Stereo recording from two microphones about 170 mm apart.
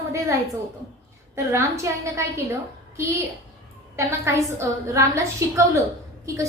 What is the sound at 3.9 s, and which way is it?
A woman's voice, 15° right (ahead or behind).